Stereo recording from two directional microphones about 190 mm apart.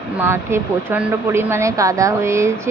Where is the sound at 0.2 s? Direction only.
10° right (ahead or behind).